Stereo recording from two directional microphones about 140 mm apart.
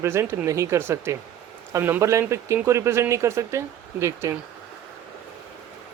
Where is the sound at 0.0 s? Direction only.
20° right (ahead or behind).